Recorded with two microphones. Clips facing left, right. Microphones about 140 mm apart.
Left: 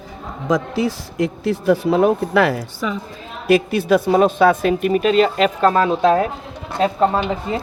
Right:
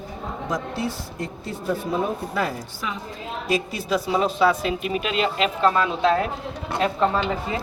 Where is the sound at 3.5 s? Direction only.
65° left (ahead or behind); by 6.2 s 45° left (ahead or behind).